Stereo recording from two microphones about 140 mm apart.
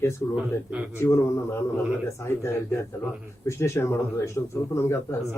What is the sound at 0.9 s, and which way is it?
A man's voice, 20° left (ahead or behind).